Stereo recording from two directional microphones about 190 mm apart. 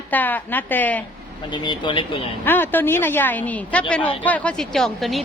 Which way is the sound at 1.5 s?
25° left (ahead or behind).